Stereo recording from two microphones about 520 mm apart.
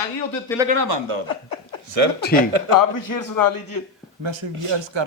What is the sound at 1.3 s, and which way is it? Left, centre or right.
Chuckle, left.